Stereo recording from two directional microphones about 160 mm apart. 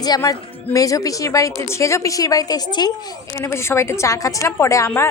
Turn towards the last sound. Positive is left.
turn(degrees=15)  # may be behind; listen again after turning